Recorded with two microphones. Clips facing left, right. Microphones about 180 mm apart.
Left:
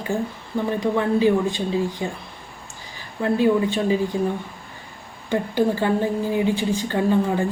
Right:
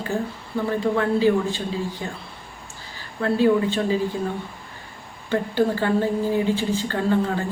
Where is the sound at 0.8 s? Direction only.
15° left (ahead or behind).